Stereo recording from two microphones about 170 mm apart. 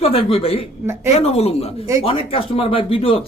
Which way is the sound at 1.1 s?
35° left (ahead or behind).